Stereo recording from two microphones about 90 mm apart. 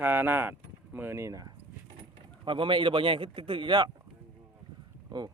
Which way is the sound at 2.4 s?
70° right (ahead or behind).